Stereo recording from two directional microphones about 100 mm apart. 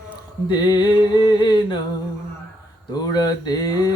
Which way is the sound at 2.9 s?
40° left (ahead or behind).